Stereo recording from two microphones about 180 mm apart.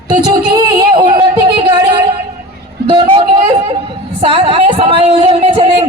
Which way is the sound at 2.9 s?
25° right (ahead or behind).